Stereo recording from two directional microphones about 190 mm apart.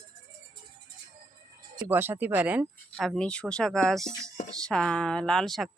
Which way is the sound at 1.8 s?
10° right (ahead or behind).